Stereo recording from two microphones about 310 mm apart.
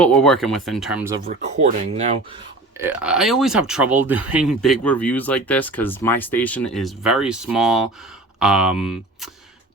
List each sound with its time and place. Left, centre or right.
0.0 s speech: centre
1.3 s speech: right
2.7 s speech: centre